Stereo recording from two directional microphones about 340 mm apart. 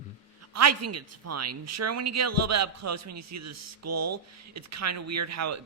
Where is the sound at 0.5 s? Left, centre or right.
Right.